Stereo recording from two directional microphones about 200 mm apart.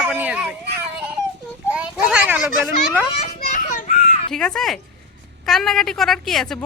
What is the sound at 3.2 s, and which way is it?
Children playing, 40° left (ahead or behind).